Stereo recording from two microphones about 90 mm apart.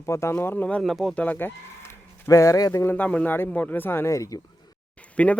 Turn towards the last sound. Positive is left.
turn(degrees=15)  # may be behind; listen again after turning